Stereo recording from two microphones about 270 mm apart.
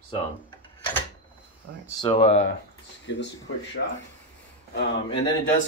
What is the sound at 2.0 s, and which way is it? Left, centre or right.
Speech, left.